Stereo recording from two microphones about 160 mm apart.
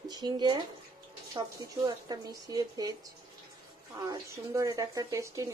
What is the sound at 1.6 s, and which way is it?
Speech, 25° right (ahead or behind).